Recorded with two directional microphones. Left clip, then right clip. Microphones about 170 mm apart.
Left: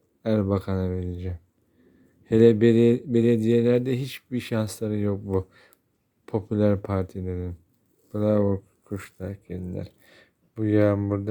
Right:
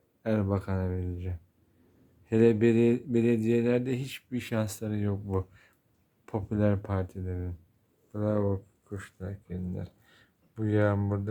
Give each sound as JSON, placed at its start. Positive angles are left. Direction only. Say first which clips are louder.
{"t": 0.2, "sound": "speech", "louder": "left 5 dB", "side_deg": 20}